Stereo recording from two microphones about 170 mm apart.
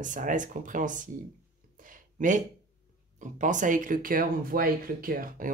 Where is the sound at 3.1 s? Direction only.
50° right (ahead or behind).